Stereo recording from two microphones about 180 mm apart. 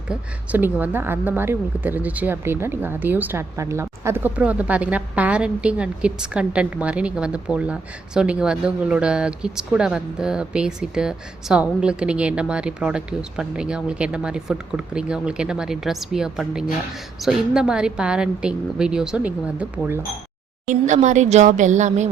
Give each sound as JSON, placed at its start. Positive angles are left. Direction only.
{"t": 0.1, "sound": "a woman's voice", "side_deg": -10}
{"t": 20.7, "sound": "speech", "side_deg": -40}